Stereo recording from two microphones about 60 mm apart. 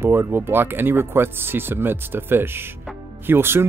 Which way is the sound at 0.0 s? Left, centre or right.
Right.